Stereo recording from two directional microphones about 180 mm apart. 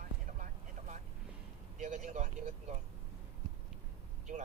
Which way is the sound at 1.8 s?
40° right (ahead or behind).